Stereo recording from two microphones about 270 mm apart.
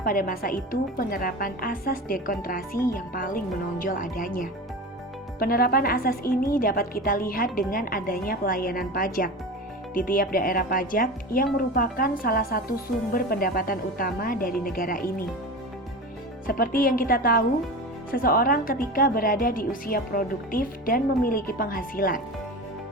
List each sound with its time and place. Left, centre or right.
0.0 s a woman's voice: left
16.5 s a woman's voice: left